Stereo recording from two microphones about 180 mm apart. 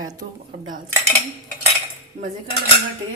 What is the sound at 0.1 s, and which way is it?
Speech, 45° right (ahead or behind).